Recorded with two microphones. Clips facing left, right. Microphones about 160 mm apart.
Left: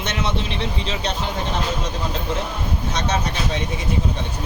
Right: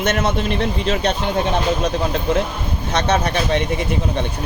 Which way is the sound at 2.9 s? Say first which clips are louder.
Right 7 dB; 60° right (ahead or behind).